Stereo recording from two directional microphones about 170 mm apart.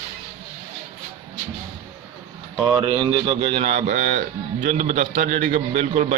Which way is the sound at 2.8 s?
35° right (ahead or behind).